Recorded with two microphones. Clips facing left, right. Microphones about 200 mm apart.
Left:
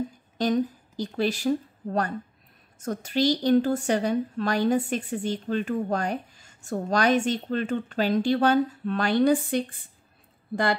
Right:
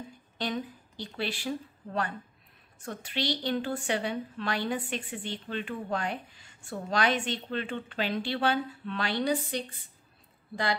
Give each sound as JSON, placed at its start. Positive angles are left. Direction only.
{"t": 0.4, "sound": "a woman's voice", "side_deg": 40}